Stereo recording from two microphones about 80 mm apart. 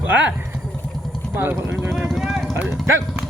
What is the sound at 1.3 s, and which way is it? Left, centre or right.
Speech, right.